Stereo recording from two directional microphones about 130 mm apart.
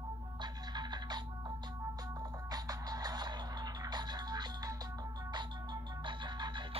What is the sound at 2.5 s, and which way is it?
Music, 30° right (ahead or behind).